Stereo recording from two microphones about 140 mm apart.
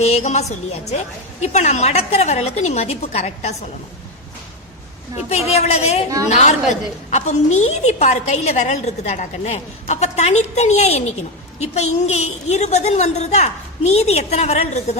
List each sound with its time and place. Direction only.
0.0 s a woman's voice: 50° left (ahead or behind)
5.3 s a woman's voice: 50° left (ahead or behind)